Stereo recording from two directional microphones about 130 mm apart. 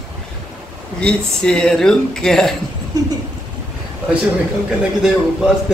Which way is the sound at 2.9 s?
25° right (ahead or behind).